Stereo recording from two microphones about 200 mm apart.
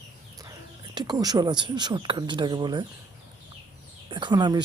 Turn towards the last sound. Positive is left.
turn(degrees=-20)  # may be behind; listen again after turning